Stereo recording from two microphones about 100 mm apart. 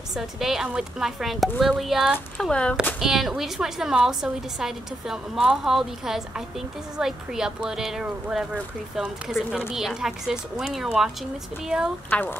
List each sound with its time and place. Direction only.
0.1 s a woman's voice: 5° right (ahead or behind)
2.3 s speech: 10° left (ahead or behind)
3.0 s a woman's voice: 5° right (ahead or behind)
12.1 s speech: 20° left (ahead or behind)